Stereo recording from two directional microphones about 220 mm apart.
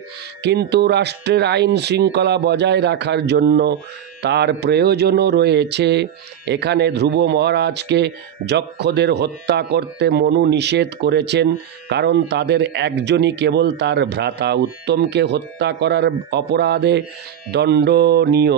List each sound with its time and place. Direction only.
0.4 s speech: 50° right (ahead or behind)